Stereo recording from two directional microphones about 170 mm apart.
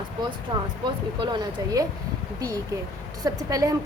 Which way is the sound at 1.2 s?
25° right (ahead or behind).